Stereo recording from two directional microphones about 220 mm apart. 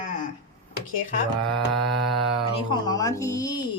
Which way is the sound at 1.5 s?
Centre (ahead or behind).